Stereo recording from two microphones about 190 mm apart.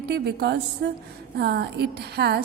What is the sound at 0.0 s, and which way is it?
A woman's voice, 60° right (ahead or behind).